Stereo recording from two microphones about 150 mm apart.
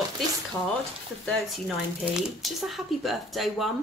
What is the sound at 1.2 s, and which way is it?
A woman's voice, centre (ahead or behind).